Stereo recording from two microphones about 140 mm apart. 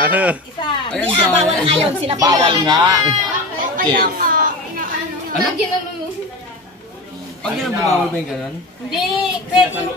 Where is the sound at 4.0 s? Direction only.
90° right.